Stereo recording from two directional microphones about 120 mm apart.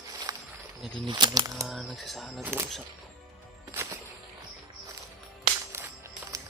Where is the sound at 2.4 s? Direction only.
20° right (ahead or behind).